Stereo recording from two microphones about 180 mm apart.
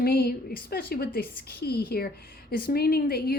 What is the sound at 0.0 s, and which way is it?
A woman's voice, 60° left (ahead or behind).